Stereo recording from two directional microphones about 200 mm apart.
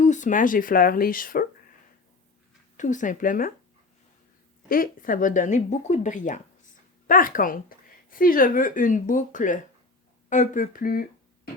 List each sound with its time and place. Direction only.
0.0 s speech: 40° left (ahead or behind)
2.7 s speech: 40° left (ahead or behind)
4.7 s speech: 45° left (ahead or behind)